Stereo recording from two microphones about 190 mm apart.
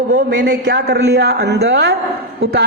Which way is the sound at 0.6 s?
60° right (ahead or behind).